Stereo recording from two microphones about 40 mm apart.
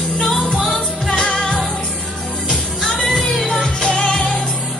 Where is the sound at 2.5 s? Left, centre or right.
Centre.